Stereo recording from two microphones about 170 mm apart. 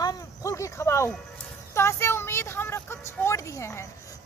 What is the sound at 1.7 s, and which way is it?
Speech, 15° left (ahead or behind).